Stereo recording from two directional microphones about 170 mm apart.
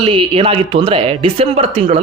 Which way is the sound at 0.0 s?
35° right (ahead or behind).